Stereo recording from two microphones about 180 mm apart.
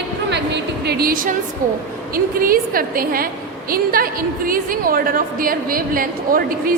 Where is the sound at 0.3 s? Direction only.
70° right (ahead or behind).